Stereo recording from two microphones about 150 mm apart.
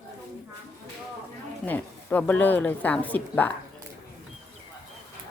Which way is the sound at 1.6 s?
10° left (ahead or behind).